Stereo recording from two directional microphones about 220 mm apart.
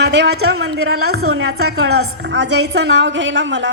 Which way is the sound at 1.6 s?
75° right (ahead or behind).